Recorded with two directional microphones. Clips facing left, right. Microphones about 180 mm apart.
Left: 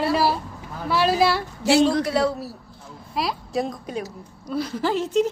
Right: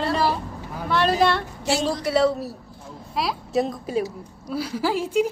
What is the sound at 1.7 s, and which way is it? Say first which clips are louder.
Speech: left 6 dB; 65° left (ahead or behind).